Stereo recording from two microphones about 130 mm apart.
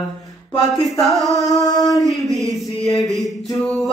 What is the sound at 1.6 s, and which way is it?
Mantra, 25° left (ahead or behind).